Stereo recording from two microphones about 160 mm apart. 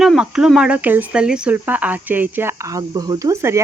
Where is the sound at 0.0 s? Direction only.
5° right (ahead or behind).